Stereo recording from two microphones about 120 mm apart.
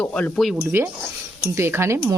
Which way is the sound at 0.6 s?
20° right (ahead or behind).